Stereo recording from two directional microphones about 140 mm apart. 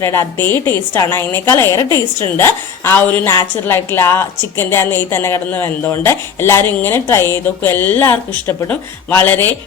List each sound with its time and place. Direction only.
0.0 s a woman's voice: 20° left (ahead or behind)